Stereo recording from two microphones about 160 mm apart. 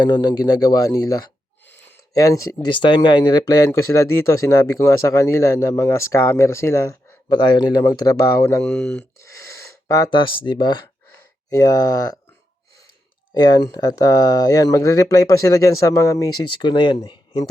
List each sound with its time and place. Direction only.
0.0 s speech: 25° left (ahead or behind)
8.6 s speech: 10° left (ahead or behind)
9.2 s speech: 20° left (ahead or behind)
13.3 s speech: 25° left (ahead or behind)